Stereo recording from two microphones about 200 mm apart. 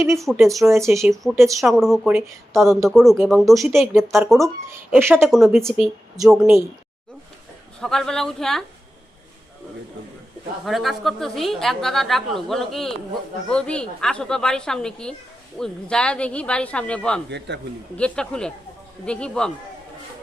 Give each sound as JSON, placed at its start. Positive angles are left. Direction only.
{"t": 0.3, "sound": "a woman's voice", "side_deg": 0}
{"t": 0.6, "sound": "speech", "side_deg": -15}
{"t": 0.9, "sound": "a woman's voice", "side_deg": 0}
{"t": 4.9, "sound": "a woman's voice", "side_deg": -10}
{"t": 7.8, "sound": "a woman's voice", "side_deg": 0}
{"t": 10.7, "sound": "a woman's voice", "side_deg": 0}
{"t": 17.2, "sound": "speech", "side_deg": -60}
{"t": 17.9, "sound": "a woman's voice", "side_deg": 5}